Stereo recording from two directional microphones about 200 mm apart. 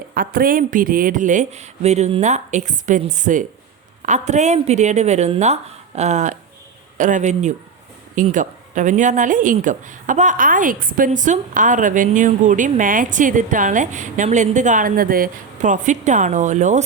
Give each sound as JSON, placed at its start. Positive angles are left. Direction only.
{"t": 0.1, "sound": "a woman's voice", "side_deg": -45}